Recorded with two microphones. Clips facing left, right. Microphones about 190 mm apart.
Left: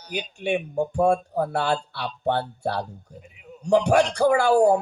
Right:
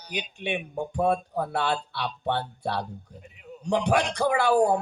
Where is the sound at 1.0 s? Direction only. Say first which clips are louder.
Left 3 dB; 45° left (ahead or behind).